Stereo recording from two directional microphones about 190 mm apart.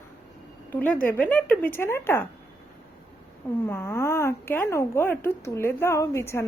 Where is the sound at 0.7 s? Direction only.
10° left (ahead or behind).